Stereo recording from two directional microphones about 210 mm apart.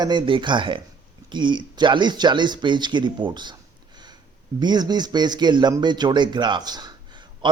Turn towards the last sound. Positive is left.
turn(degrees=-20)  # may be behind; listen again after turning